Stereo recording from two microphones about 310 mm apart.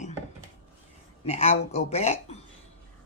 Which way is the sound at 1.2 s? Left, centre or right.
Left.